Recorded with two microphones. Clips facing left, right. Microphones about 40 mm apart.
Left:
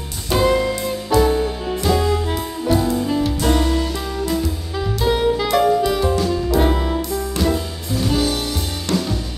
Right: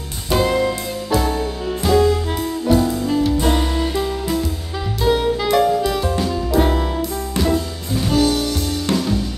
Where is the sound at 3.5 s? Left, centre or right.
Centre.